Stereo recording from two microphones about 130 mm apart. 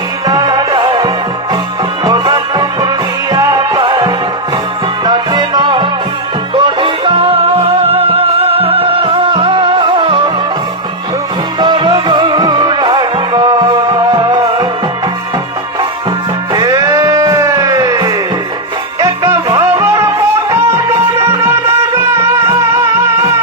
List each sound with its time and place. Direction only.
0.3 s music: 30° right (ahead or behind)
3.8 s music: 35° right (ahead or behind)
11.6 s music: 35° right (ahead or behind)
16.6 s music: 30° right (ahead or behind)